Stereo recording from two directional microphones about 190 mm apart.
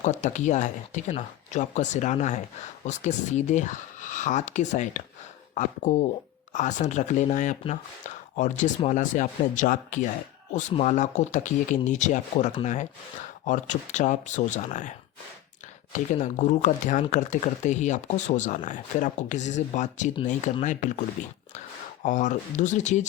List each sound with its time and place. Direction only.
0.0 s speech: 40° left (ahead or behind)
22.0 s speech: 40° left (ahead or behind)